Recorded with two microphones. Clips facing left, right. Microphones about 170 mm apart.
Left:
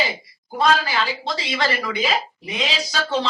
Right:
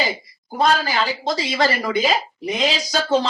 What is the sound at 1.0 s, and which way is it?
Speech, 40° right (ahead or behind).